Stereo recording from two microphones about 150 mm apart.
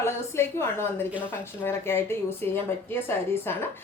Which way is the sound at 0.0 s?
15° left (ahead or behind).